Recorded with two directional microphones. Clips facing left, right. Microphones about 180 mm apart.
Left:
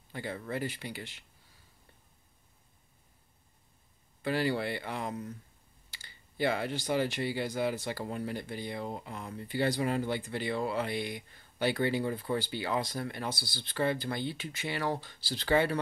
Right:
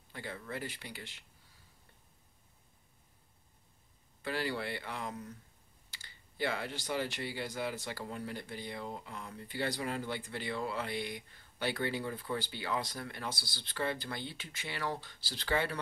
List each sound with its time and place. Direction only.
0.1 s speech: 20° left (ahead or behind)
4.2 s speech: 20° left (ahead or behind)
6.3 s speech: 15° left (ahead or behind)
11.7 s speech: 25° left (ahead or behind)